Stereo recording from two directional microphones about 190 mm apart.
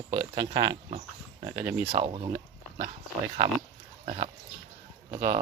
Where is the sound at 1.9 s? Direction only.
25° right (ahead or behind).